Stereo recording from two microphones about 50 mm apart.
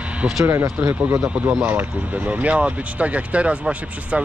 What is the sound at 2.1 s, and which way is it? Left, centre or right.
Speech, right.